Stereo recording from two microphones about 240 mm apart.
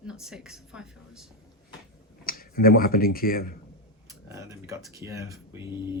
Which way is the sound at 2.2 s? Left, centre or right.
Left.